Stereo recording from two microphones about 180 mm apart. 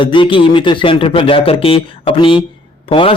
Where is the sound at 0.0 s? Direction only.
25° left (ahead or behind).